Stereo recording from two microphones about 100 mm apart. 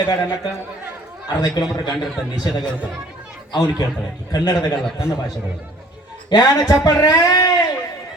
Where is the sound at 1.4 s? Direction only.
40° left (ahead or behind).